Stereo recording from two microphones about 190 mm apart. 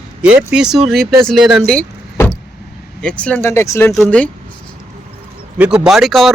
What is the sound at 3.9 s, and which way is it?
Speech, 5° left (ahead or behind).